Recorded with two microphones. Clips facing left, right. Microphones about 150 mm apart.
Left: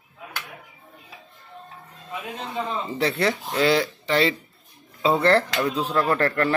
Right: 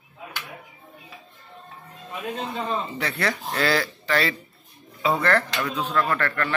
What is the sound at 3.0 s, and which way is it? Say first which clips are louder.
Speech: left 4 dB; 25° left (ahead or behind).